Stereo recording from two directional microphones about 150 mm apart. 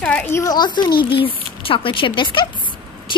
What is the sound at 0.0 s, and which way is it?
A woman's voice, 10° left (ahead or behind).